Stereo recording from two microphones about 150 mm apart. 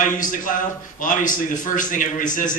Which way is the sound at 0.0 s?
60° left (ahead or behind).